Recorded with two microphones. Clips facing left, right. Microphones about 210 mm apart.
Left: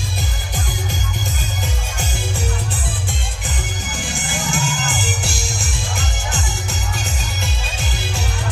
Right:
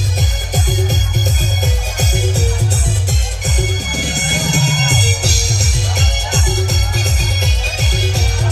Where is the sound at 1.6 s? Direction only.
40° right (ahead or behind).